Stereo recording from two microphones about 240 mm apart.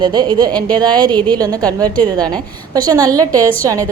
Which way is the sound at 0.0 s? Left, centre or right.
Centre.